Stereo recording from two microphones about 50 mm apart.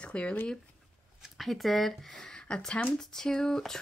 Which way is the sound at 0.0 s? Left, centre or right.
Left.